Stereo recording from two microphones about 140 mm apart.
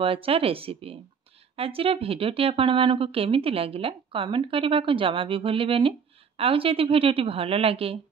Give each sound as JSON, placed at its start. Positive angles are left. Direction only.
{"t": 0.0, "sound": "speech", "side_deg": -40}